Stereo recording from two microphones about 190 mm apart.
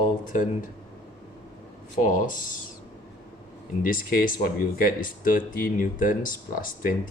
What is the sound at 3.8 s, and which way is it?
Speech, 45° left (ahead or behind).